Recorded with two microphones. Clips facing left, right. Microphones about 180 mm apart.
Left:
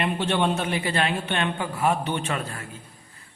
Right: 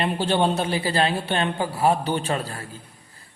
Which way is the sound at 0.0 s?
35° right (ahead or behind).